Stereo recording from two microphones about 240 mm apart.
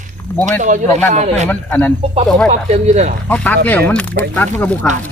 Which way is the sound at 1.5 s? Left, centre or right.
Centre.